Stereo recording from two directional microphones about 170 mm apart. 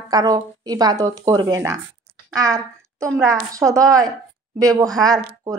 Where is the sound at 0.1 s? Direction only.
20° right (ahead or behind).